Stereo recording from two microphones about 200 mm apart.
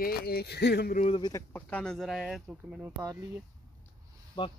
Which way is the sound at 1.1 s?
20° left (ahead or behind).